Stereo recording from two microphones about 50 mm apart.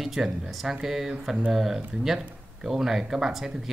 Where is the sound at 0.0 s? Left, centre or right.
Centre.